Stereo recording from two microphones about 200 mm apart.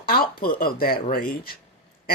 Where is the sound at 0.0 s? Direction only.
50° left (ahead or behind).